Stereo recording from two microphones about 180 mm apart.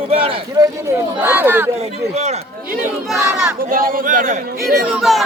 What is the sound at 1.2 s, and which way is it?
Speech, 10° right (ahead or behind).